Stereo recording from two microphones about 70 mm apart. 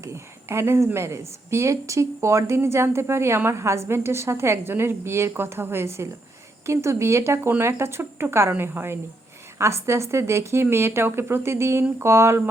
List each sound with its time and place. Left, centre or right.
0.0 s speech: right